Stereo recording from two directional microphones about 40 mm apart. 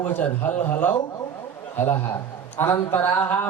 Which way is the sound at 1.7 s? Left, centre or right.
Left.